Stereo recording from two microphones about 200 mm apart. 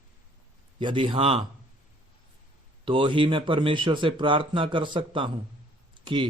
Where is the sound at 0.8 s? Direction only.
25° right (ahead or behind).